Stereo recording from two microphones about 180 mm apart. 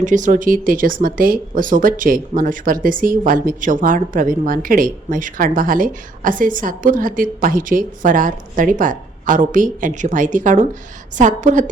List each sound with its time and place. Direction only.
0.0 s speech: 45° right (ahead or behind)